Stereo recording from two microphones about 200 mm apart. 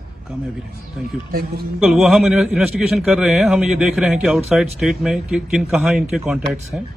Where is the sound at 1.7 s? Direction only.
Centre (ahead or behind).